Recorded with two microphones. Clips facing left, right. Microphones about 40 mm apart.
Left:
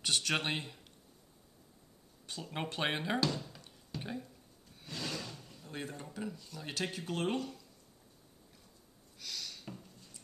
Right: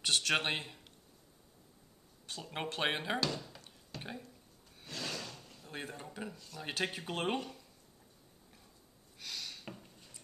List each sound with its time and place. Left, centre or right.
0.0 s speech: centre
2.2 s speech: centre
4.7 s a sound: centre
6.3 s speech: centre
6.6 s speech: centre
9.2 s a sound: centre